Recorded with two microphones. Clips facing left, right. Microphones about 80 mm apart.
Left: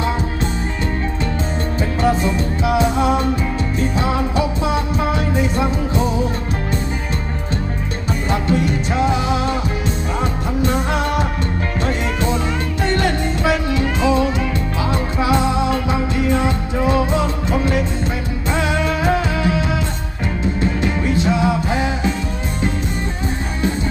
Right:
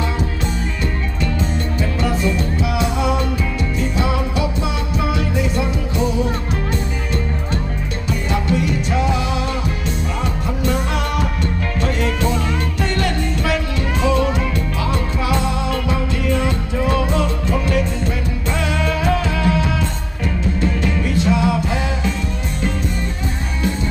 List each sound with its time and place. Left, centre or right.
2.0 s music: left
8.4 s music: left
10.6 s music: left
20.8 s music: left